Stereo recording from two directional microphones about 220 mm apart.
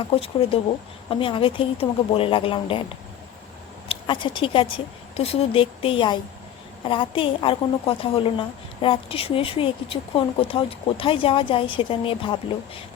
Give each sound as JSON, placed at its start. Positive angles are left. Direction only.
{"t": 0.1, "sound": "a woman's voice", "side_deg": 25}
{"t": 3.8, "sound": "a woman's voice", "side_deg": 20}